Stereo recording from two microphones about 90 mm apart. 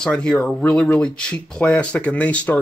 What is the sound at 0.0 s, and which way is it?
Speech, 5° left (ahead or behind).